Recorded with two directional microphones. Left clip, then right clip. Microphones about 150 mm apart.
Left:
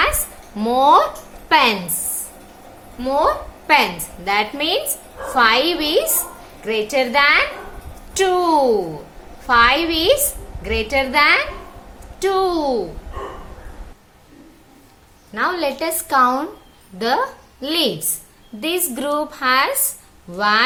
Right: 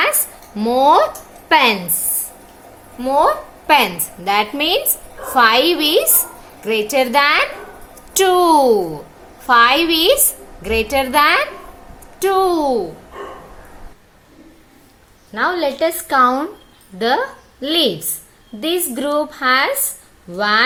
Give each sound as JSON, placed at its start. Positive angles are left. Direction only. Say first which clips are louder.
{"t": 0.5, "sound": "a woman's voice", "louder": "right 1 dB", "side_deg": -20}
{"t": 3.0, "sound": "a woman's voice", "louder": "right 3 dB", "side_deg": -45}
{"t": 15.4, "sound": "a woman's voice", "louder": "right 3 dB", "side_deg": -20}